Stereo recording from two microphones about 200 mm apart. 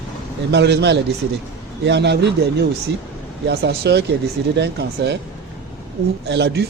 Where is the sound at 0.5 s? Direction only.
60° right (ahead or behind).